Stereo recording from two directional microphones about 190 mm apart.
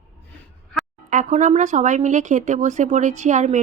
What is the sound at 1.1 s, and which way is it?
Speech, 40° right (ahead or behind).